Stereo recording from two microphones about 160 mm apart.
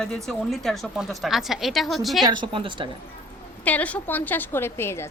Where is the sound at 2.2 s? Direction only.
30° right (ahead or behind).